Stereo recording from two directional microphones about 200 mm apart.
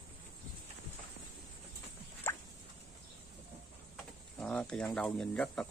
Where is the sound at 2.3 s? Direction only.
10° left (ahead or behind).